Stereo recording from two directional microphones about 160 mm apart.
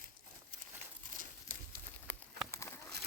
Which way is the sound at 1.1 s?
55° right (ahead or behind).